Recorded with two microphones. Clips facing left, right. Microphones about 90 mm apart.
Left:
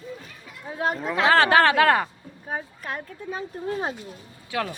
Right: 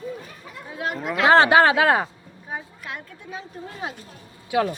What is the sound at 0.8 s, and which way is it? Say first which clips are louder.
Speech: left 3 dB; 35° left (ahead or behind).